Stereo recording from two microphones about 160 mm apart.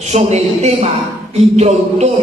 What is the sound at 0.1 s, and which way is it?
A man's voice, 45° right (ahead or behind).